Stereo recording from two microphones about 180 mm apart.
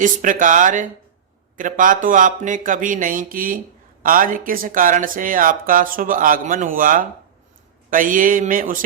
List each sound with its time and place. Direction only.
0.0 s speech: 45° right (ahead or behind)